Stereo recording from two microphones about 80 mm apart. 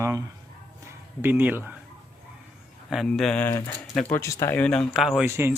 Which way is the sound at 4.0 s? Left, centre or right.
Left.